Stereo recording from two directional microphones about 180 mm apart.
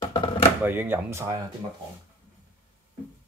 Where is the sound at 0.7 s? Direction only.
10° right (ahead or behind).